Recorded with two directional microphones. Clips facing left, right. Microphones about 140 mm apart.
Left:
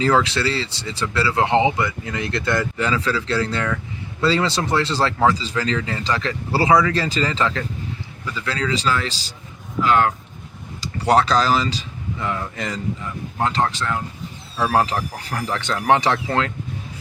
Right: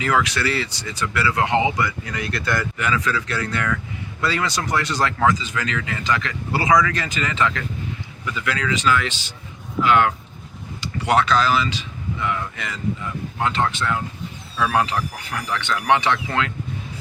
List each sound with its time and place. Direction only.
0.0 s speech: 30° left (ahead or behind)